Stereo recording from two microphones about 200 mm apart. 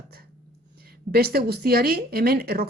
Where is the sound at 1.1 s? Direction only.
50° right (ahead or behind).